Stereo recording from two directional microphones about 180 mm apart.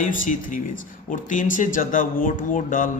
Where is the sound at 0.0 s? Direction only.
45° left (ahead or behind).